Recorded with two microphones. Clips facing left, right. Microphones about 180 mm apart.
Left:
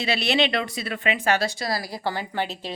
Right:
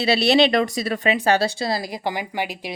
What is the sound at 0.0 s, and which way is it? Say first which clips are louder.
Speech: right 6 dB; 35° right (ahead or behind).